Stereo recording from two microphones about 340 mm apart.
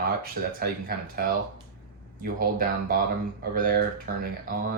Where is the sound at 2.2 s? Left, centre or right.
Right.